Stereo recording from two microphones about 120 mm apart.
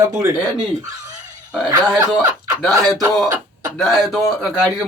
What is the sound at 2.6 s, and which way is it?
Speech, centre (ahead or behind).